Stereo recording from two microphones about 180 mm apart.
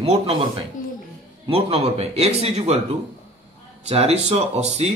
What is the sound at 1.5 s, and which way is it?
Speech, 35° right (ahead or behind).